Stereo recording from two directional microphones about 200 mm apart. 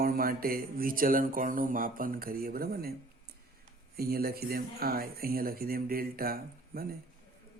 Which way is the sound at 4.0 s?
50° right (ahead or behind).